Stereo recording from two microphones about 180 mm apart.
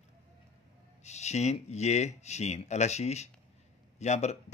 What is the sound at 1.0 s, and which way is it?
Speech, 40° left (ahead or behind).